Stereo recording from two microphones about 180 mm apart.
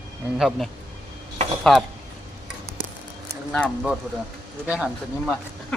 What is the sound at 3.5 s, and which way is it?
A man's voice, 5° left (ahead or behind).